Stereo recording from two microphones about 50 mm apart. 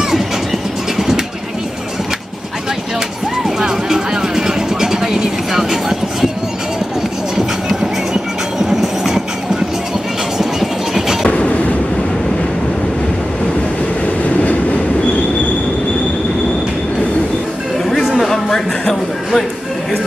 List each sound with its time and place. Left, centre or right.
0.9 s vehicle: centre
3.4 s vehicle: centre
7.3 s train: centre
10.4 s vehicle: centre
11.2 s train: left
17.8 s a sound: centre